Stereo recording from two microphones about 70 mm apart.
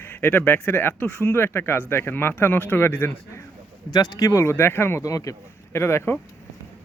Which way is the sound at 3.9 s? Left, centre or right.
Left.